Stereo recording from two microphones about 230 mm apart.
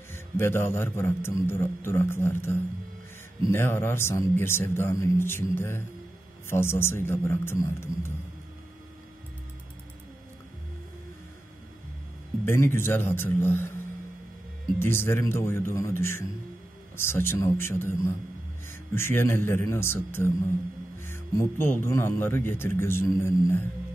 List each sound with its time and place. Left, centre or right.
0.1 s speech: centre
3.5 s speech: centre
12.4 s speech: centre
14.8 s speech: centre